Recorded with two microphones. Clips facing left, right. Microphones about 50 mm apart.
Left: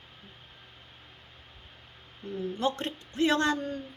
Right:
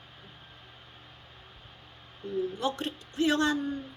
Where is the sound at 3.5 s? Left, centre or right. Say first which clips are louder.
Right 2 dB; centre.